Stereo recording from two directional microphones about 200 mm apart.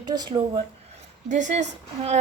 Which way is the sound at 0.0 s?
20° right (ahead or behind).